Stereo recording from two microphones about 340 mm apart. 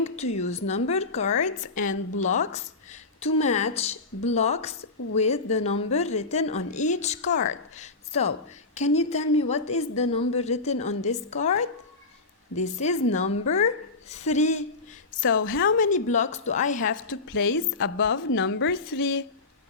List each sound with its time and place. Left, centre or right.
0.3 s a woman's voice: centre
16.9 s a woman's voice: left